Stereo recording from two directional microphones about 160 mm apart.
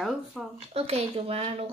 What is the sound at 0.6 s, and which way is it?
Speech, 40° right (ahead or behind).